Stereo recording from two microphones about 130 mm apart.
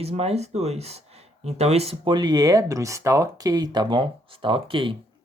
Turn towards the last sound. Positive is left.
turn(degrees=-40)  # may be behind; listen again after turning